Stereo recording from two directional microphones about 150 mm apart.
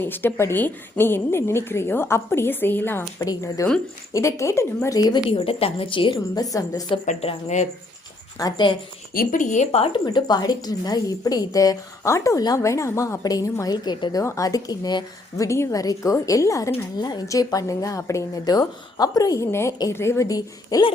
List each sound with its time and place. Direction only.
0.0 s a woman's voice: 15° left (ahead or behind); by 6.1 s 35° left (ahead or behind)
6.1 s a woman's voice: 25° left (ahead or behind)
7.0 s a woman's voice: 50° left (ahead or behind)
8.4 s a woman's voice: 25° left (ahead or behind)
9.1 s speech: 60° left (ahead or behind)
10.1 s a woman's voice: 25° left (ahead or behind)